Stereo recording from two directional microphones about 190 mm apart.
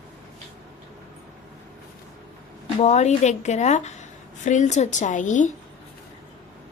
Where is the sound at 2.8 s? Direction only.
35° left (ahead or behind).